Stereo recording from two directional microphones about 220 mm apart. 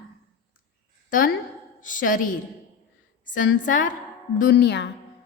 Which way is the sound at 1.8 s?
35° left (ahead or behind).